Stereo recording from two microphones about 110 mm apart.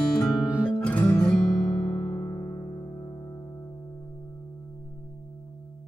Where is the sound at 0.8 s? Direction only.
15° left (ahead or behind).